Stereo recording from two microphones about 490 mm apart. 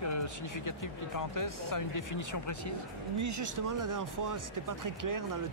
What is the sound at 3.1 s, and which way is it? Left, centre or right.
Speech, right.